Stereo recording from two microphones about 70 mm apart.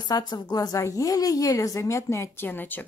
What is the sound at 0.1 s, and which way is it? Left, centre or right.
Speech, left.